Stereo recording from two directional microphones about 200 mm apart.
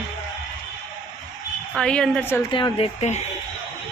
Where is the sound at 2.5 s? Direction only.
25° left (ahead or behind).